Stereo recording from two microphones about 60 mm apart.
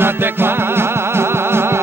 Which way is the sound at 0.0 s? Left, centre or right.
Right.